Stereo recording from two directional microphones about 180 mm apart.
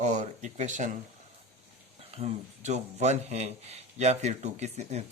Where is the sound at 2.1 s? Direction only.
35° right (ahead or behind).